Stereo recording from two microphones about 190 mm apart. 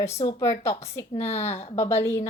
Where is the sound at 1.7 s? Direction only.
15° left (ahead or behind).